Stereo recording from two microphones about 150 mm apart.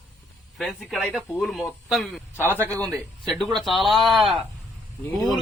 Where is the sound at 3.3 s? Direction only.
Centre (ahead or behind).